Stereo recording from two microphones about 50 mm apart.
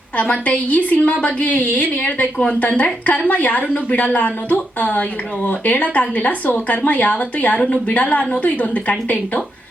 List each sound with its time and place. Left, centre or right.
0.2 s a woman's voice: left